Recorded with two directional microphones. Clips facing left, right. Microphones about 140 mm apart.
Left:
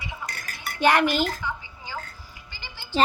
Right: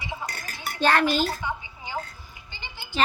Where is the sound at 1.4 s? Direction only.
20° right (ahead or behind).